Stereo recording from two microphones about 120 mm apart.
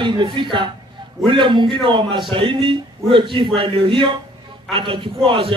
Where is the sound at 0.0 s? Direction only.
40° right (ahead or behind).